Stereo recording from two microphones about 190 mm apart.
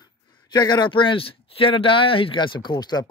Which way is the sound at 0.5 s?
20° left (ahead or behind).